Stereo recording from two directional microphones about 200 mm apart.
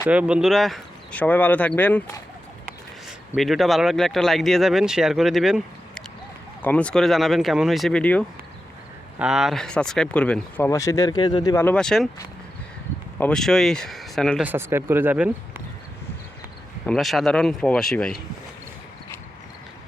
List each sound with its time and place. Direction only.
0.1 s speech: 5° right (ahead or behind)
13.1 s speech: 5° left (ahead or behind)
16.8 s speech: centre (ahead or behind)